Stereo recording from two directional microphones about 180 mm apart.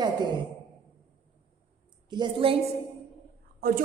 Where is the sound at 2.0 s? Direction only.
25° right (ahead or behind).